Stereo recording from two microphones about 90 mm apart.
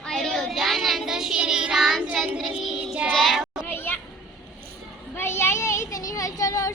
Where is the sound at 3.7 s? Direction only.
25° left (ahead or behind).